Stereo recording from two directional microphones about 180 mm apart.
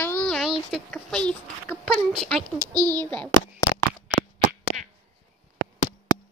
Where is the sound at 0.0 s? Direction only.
10° left (ahead or behind).